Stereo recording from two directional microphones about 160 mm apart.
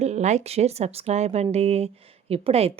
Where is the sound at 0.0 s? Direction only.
45° right (ahead or behind).